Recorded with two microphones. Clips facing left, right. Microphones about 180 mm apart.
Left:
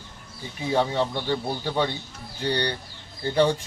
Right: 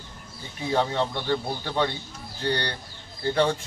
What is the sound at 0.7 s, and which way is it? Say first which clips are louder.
Speech: left 1 dB; 10° left (ahead or behind).